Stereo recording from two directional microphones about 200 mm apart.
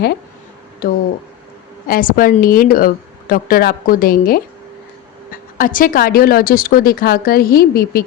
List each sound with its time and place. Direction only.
0.8 s a woman's voice: 45° left (ahead or behind)